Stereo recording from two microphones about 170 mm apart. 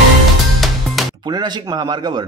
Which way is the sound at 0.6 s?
Centre (ahead or behind).